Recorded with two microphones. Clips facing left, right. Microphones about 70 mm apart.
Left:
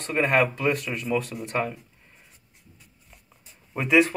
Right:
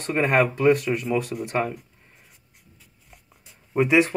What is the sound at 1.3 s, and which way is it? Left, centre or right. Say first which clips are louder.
Speech: right 5 dB; centre.